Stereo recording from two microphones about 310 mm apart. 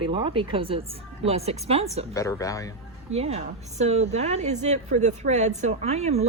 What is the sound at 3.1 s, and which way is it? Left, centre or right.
A woman's voice, centre.